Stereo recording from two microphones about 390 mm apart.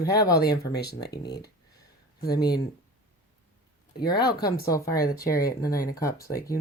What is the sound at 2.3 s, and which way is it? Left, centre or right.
Speech, centre.